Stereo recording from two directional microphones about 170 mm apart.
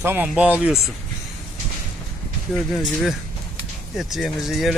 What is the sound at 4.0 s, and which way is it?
Speech, centre (ahead or behind).